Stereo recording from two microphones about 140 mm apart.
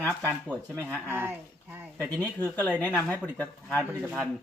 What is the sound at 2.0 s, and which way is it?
Speech, 10° left (ahead or behind).